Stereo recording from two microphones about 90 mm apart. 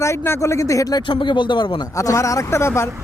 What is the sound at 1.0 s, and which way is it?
Speech, 65° left (ahead or behind).